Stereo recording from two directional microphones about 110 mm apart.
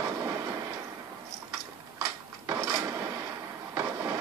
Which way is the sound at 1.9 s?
30° right (ahead or behind).